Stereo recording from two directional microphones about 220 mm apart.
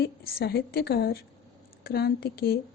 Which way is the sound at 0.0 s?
45° left (ahead or behind).